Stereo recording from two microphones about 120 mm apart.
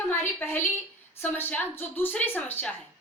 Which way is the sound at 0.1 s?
20° left (ahead or behind).